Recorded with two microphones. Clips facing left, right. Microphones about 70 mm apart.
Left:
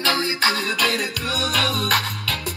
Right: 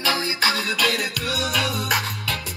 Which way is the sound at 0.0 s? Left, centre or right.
Right.